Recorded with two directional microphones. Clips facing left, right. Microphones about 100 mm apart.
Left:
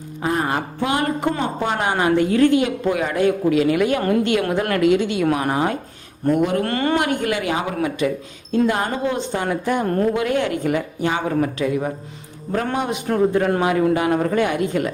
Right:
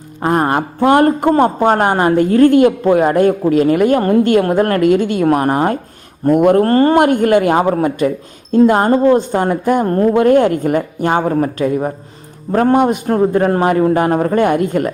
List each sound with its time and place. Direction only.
0.2 s speech: 50° right (ahead or behind)